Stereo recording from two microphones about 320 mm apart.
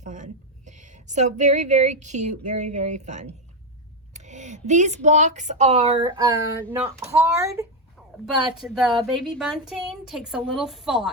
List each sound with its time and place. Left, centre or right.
0.0 s a woman's voice: right
4.1 s a sound: right
5.0 s a child's voice: right; by 11.1 s centre